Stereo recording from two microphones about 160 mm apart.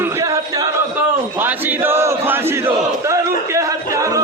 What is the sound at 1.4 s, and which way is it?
Chant, 15° right (ahead or behind).